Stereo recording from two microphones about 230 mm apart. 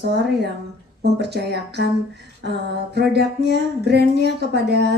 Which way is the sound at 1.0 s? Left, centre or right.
Right.